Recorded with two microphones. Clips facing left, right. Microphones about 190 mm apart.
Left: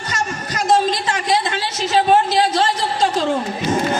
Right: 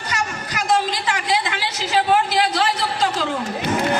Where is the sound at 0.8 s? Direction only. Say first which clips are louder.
Left 4 dB; 25° left (ahead or behind).